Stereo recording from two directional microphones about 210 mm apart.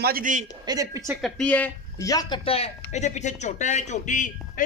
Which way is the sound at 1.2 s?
Centre (ahead or behind).